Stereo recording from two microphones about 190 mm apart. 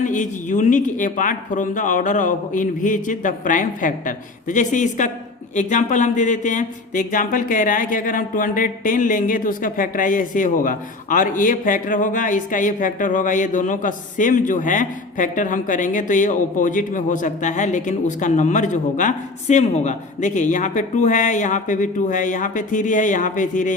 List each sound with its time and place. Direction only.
0.0 s speech: 40° left (ahead or behind)